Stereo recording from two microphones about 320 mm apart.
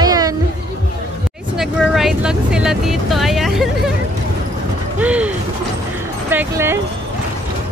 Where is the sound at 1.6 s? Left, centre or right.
Centre.